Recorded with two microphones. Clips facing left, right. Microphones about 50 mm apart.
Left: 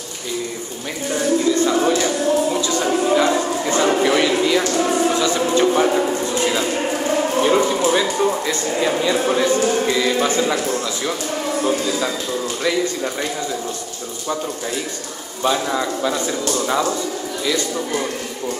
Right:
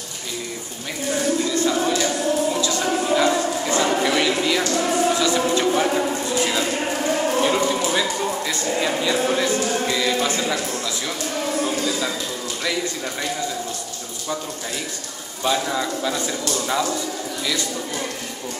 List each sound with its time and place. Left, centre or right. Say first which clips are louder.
1.1 s a sound: left 4 dB; centre
4.6 s music: left 2 dB; centre
5.2 s music: left 3 dB; centre
7.2 s a sound: left 4 dB; centre
7.9 s a man's voice: left 5 dB; centre
15.4 s speech: left 3 dB; centre